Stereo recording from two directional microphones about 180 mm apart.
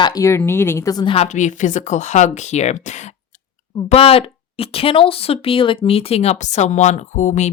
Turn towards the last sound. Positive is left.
turn(degrees=45)  # may be behind; listen again after turning